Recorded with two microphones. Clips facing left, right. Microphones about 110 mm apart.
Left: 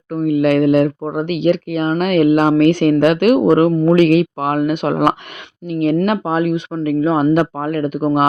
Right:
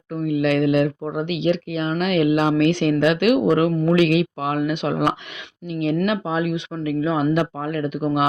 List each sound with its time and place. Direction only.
0.1 s speech: 50° left (ahead or behind)